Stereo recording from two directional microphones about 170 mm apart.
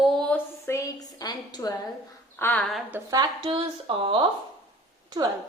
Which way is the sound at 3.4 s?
30° right (ahead or behind).